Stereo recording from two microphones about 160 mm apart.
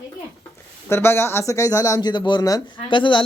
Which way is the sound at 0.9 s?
15° left (ahead or behind).